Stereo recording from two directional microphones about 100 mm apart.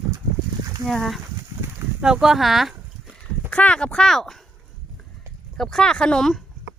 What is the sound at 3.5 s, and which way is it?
Speech, 10° left (ahead or behind).